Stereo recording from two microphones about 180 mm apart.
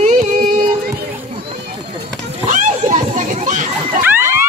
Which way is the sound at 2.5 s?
45° right (ahead or behind).